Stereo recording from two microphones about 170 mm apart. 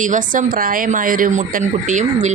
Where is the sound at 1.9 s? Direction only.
45° right (ahead or behind).